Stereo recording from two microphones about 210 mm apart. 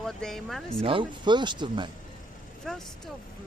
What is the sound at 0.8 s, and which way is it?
Speech, 25° right (ahead or behind).